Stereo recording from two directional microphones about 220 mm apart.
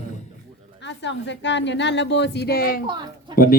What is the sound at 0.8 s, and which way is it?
A woman's voice, 55° left (ahead or behind).